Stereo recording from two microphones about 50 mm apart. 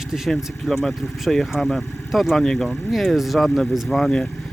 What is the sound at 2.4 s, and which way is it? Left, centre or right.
Speech, centre.